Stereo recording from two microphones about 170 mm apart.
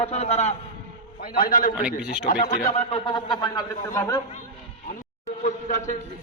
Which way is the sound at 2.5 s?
40° left (ahead or behind).